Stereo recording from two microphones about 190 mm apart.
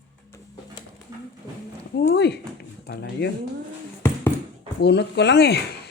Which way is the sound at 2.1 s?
60° left (ahead or behind).